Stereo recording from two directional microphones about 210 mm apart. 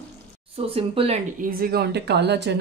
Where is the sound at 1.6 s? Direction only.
50° right (ahead or behind).